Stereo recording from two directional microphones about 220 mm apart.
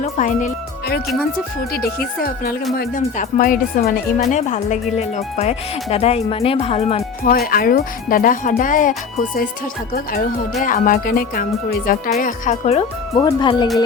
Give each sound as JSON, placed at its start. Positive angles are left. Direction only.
{"t": 0.0, "sound": "speech", "side_deg": 35}
{"t": 7.3, "sound": "speech", "side_deg": 40}
{"t": 13.2, "sound": "speech", "side_deg": 20}